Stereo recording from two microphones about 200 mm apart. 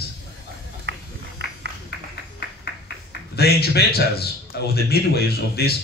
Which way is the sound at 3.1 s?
50° left (ahead or behind).